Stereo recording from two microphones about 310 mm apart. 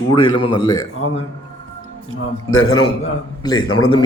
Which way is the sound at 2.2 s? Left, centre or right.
Left.